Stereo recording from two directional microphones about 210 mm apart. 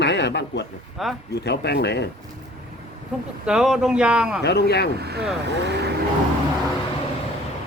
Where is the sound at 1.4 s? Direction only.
50° left (ahead or behind).